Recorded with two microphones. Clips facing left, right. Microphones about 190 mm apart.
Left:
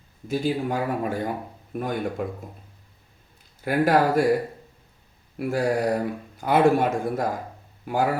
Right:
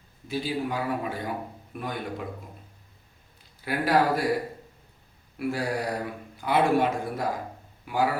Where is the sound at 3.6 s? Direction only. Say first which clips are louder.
Left 4 dB; 45° left (ahead or behind).